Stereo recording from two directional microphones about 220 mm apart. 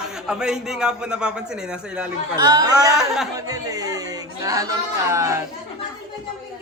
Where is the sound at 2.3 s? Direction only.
20° right (ahead or behind).